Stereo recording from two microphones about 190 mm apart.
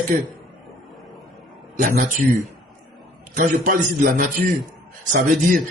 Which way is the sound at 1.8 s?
45° right (ahead or behind).